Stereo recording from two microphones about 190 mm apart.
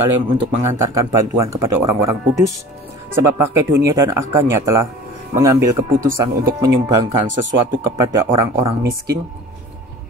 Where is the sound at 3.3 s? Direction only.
15° right (ahead or behind).